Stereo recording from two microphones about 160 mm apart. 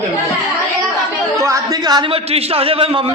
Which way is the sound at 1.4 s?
20° right (ahead or behind).